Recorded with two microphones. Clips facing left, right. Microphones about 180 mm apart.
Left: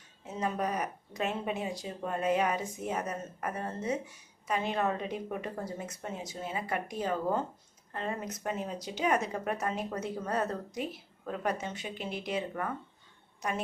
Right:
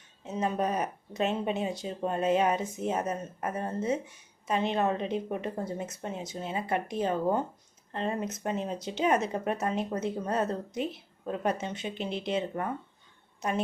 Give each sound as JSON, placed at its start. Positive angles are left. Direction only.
{"t": 0.3, "sound": "a woman's voice", "side_deg": -25}